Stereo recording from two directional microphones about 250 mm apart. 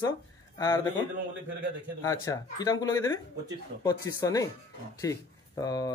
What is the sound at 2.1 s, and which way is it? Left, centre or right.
Speech, centre.